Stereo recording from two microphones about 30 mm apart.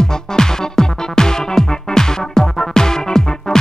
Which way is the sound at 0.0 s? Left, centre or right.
Left.